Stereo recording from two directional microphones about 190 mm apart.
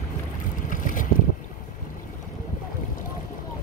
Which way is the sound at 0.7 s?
45° left (ahead or behind).